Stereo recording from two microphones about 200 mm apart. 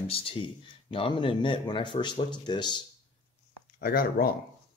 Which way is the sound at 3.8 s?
45° left (ahead or behind).